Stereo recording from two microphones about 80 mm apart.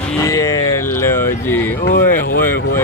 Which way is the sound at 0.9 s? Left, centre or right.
Left.